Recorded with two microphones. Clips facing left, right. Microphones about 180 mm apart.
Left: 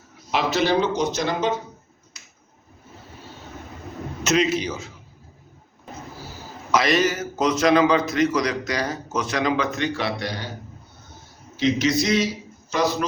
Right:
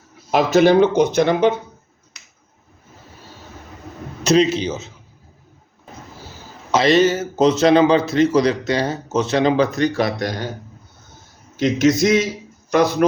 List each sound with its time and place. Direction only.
0.3 s speech: 45° right (ahead or behind)
4.2 s a man's voice: 30° right (ahead or behind)
6.7 s a man's voice: 25° right (ahead or behind); by 10.5 s 45° right (ahead or behind)
11.5 s a man's voice: 50° right (ahead or behind)